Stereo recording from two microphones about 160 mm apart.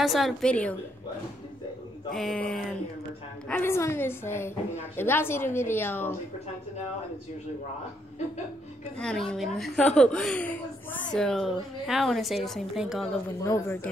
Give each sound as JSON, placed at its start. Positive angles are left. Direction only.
{"t": 0.0, "sound": "a woman's voice", "side_deg": 0}
{"t": 2.1, "sound": "a woman's voice", "side_deg": 5}
{"t": 8.9, "sound": "a woman's voice", "side_deg": 5}
{"t": 13.4, "sound": "a woman's voice", "side_deg": 15}